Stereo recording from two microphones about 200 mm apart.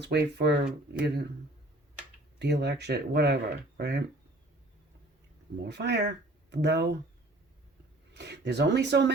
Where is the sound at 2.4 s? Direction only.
55° right (ahead or behind).